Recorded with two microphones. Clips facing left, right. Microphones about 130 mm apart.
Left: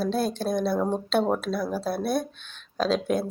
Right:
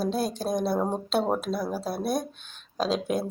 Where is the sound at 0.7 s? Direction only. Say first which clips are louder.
Left 2 dB; 10° right (ahead or behind).